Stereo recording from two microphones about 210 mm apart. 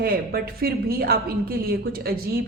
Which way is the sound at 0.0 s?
45° right (ahead or behind).